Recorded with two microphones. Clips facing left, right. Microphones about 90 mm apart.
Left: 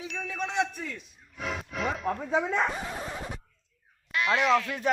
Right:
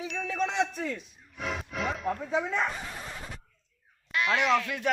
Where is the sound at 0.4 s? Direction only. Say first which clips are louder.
Even; 20° right (ahead or behind).